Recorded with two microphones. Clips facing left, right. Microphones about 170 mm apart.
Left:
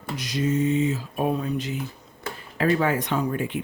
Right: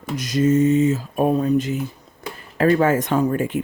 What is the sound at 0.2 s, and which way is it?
Speech, 45° right (ahead or behind).